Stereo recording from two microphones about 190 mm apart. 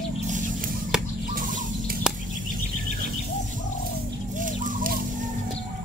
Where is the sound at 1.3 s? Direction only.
50° right (ahead or behind).